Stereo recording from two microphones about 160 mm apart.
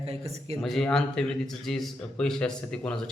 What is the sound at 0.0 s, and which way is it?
Speech, 40° right (ahead or behind).